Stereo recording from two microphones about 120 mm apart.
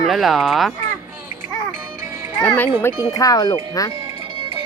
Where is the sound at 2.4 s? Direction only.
15° left (ahead or behind).